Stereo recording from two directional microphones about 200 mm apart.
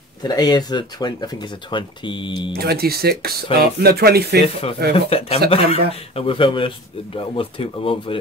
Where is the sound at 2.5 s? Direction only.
50° right (ahead or behind).